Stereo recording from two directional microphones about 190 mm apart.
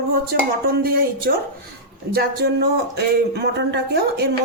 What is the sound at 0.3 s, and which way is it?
Speech, 55° right (ahead or behind).